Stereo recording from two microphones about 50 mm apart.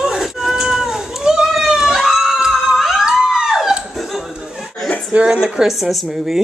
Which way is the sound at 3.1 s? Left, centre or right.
Centre.